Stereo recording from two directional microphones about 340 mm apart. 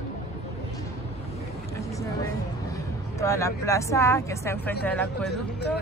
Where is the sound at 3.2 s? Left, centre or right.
Centre.